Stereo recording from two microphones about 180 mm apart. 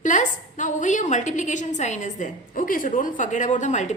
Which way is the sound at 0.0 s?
45° left (ahead or behind).